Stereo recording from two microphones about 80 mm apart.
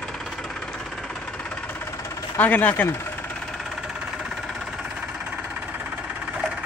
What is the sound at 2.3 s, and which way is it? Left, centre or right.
Speech, left.